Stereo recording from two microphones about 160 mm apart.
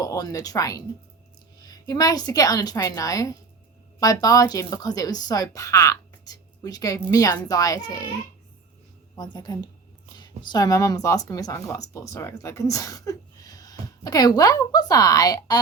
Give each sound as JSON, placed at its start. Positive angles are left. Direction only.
{"t": 0.0, "sound": "a woman's voice", "side_deg": 20}
{"t": 9.1, "sound": "a woman's voice", "side_deg": 25}